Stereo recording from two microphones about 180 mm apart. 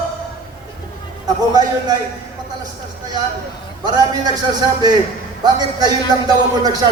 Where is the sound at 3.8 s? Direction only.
25° right (ahead or behind).